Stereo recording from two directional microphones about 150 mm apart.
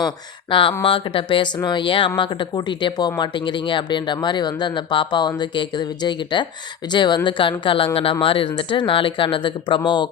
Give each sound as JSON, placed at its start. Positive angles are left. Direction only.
{"t": 0.5, "sound": "speech", "side_deg": 35}